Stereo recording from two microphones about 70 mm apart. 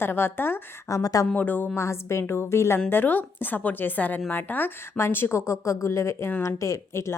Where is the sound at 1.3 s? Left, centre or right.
Left.